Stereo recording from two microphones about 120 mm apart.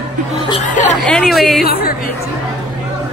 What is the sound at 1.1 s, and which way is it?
Speech, 5° left (ahead or behind).